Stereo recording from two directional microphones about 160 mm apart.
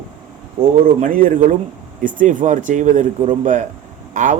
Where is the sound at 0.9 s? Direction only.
60° right (ahead or behind).